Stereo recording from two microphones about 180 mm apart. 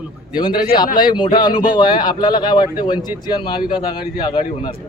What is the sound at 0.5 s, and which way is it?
Speech, 55° left (ahead or behind).